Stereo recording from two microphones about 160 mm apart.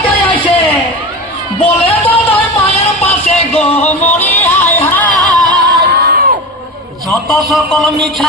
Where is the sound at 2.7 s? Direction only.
40° left (ahead or behind).